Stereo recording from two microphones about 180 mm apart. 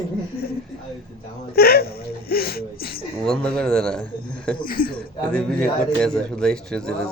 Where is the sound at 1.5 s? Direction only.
60° left (ahead or behind).